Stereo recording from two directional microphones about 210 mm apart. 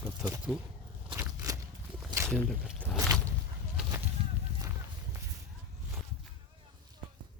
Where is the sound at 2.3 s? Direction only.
Centre (ahead or behind).